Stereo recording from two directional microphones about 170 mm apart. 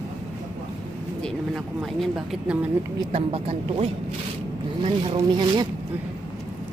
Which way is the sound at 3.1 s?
35° right (ahead or behind).